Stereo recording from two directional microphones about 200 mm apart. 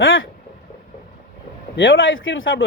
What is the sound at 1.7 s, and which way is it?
Speech, 70° left (ahead or behind).